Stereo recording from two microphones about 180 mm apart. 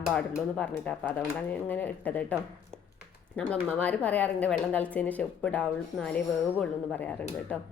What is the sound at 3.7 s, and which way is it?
A woman's voice, 10° left (ahead or behind).